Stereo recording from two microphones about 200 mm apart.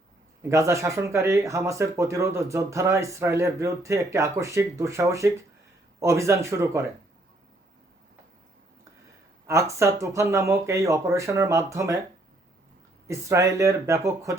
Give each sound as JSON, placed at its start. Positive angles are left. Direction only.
{"t": 0.4, "sound": "speech", "side_deg": -15}
{"t": 9.5, "sound": "speech", "side_deg": -15}
{"t": 13.1, "sound": "speech", "side_deg": -15}